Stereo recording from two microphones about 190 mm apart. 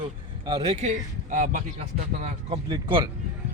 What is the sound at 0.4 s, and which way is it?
Speech, 30° right (ahead or behind).